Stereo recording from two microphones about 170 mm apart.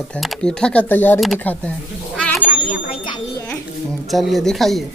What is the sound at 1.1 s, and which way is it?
Speech, centre (ahead or behind).